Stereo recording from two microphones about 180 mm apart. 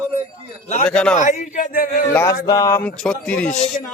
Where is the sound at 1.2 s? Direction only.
45° left (ahead or behind).